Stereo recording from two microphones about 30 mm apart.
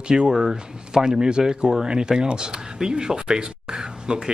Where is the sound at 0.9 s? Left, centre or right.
Right.